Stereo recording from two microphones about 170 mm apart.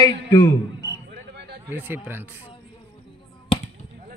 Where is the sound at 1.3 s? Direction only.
80° right.